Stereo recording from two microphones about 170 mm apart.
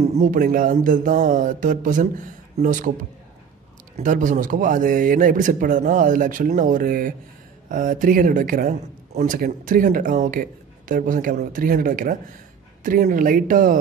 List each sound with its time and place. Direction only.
0.0 s speech: 45° right (ahead or behind)
3.9 s speech: 50° right (ahead or behind)